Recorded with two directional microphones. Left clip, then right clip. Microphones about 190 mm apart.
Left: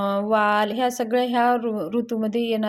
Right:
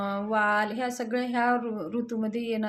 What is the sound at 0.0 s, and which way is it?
Speech, 30° left (ahead or behind).